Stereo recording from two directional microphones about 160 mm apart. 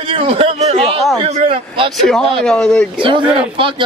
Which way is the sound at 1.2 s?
35° right (ahead or behind).